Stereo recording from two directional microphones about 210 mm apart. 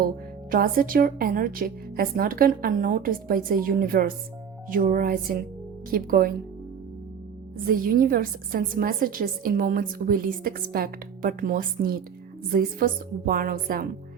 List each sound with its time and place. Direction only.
0.5 s a woman's voice: 45° right (ahead or behind)
7.7 s a woman's voice: 45° right (ahead or behind)